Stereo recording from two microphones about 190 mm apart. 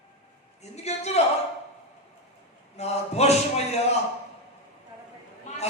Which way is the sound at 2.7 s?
35° left (ahead or behind).